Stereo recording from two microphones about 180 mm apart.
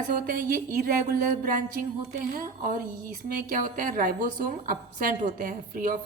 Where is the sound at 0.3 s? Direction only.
55° right (ahead or behind).